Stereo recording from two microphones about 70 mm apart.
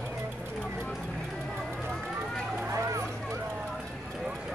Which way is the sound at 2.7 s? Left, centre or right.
Right.